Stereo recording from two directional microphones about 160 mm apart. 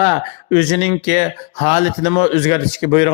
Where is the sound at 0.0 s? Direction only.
40° left (ahead or behind).